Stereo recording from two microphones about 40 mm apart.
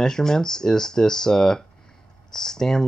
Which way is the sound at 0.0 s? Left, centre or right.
Centre.